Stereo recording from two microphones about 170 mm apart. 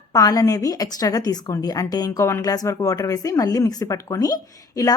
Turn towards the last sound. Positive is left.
turn(degrees=20)  # may be behind; listen again after turning